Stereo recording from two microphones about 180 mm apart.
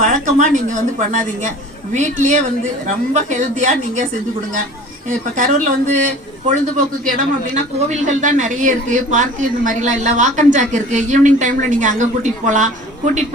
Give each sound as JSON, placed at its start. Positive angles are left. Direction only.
{"t": 0.0, "sound": "speech", "side_deg": -45}
{"t": 5.4, "sound": "speech", "side_deg": -45}